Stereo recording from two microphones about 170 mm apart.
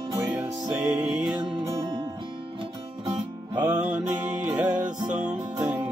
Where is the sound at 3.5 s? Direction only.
10° right (ahead or behind).